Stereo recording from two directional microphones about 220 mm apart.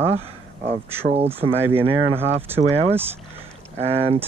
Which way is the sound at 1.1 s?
25° right (ahead or behind).